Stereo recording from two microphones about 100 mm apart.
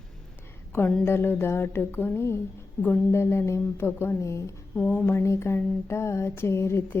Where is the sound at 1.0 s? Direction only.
25° left (ahead or behind).